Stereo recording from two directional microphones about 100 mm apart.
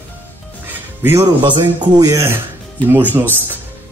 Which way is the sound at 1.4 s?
50° right (ahead or behind).